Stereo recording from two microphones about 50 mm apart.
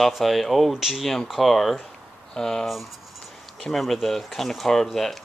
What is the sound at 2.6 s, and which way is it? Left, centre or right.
Speech, centre.